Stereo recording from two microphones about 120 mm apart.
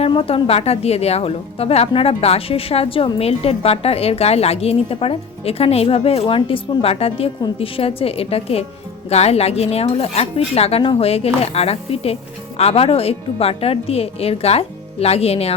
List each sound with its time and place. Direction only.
0.1 s a woman's voice: 45° left (ahead or behind)